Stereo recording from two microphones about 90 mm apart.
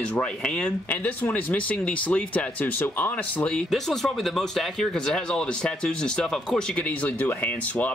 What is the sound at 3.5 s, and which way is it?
Speech, 5° left (ahead or behind).